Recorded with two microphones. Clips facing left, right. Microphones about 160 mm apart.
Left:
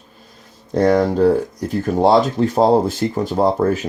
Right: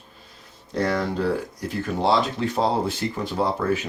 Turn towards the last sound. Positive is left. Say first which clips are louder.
# left 7 dB
turn(degrees=40)  # may be behind; listen again after turning